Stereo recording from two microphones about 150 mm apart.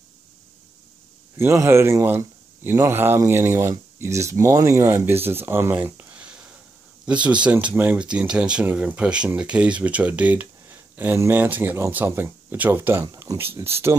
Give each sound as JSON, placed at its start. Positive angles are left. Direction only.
{"t": 1.4, "sound": "speech", "side_deg": -15}